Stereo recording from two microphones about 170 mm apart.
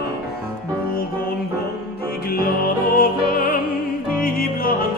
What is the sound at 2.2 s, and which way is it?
Music, 60° left (ahead or behind).